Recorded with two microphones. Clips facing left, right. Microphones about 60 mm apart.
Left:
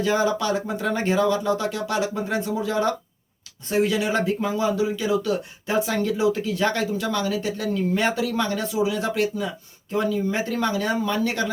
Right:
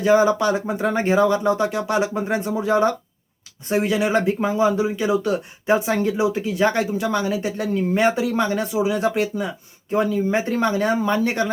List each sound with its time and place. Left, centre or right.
0.0 s speech: right